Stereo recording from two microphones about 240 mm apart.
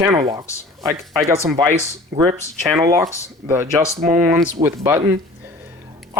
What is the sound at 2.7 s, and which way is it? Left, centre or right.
Speech, centre.